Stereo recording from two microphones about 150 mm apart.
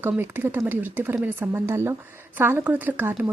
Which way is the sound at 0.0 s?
15° right (ahead or behind).